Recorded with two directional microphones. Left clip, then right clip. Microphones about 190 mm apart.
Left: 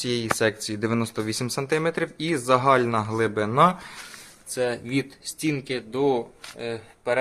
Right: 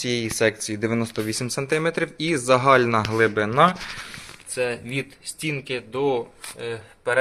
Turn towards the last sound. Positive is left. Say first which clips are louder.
# right 1 dB
turn(degrees=20)  # may be behind; listen again after turning